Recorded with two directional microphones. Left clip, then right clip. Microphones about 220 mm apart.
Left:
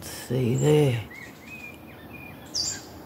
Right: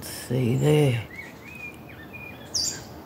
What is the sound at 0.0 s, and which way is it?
Speech, centre (ahead or behind).